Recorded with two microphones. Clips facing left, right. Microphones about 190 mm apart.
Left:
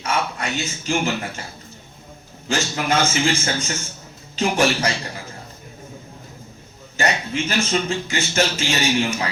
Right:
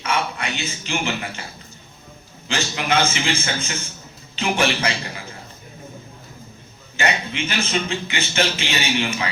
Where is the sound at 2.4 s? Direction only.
45° left (ahead or behind).